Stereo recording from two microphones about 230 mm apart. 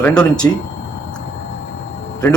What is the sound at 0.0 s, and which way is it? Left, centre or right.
Speech, centre.